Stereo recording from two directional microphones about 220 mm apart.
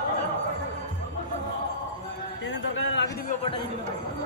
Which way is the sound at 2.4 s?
55° left (ahead or behind).